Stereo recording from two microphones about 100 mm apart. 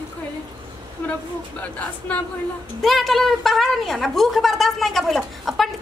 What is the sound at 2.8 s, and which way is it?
A woman's voice, centre (ahead or behind).